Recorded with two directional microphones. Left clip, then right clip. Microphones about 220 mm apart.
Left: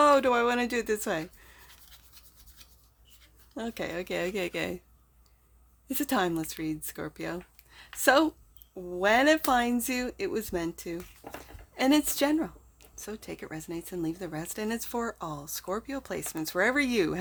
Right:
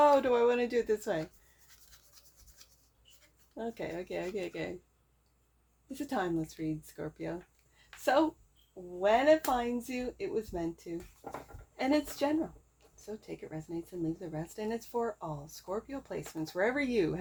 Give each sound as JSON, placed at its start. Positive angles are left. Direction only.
{"t": 0.0, "sound": "speech", "side_deg": 35}
{"t": 3.5, "sound": "speech", "side_deg": 40}
{"t": 5.9, "sound": "speech", "side_deg": 40}
{"t": 9.0, "sound": "speech", "side_deg": 45}
{"t": 11.2, "sound": "speech", "side_deg": 15}
{"t": 11.7, "sound": "speech", "side_deg": 40}